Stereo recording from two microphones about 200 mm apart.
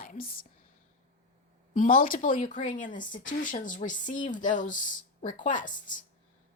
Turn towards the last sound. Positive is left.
turn(degrees=40)  # may be behind; listen again after turning